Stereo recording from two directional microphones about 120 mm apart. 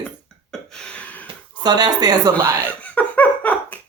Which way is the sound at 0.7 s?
10° left (ahead or behind).